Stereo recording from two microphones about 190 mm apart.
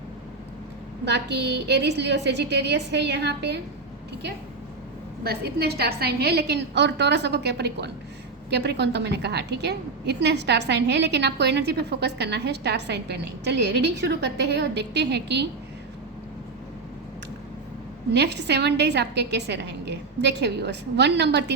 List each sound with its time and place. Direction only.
1.0 s a woman's voice: 60° right (ahead or behind)
5.2 s a woman's voice: 55° right (ahead or behind)
18.1 s a woman's voice: 60° right (ahead or behind)